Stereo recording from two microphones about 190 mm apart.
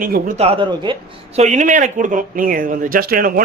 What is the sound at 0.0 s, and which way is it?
Speech, 45° right (ahead or behind).